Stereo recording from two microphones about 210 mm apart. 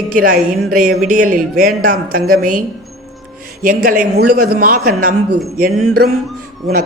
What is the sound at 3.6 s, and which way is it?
Speech, 45° right (ahead or behind).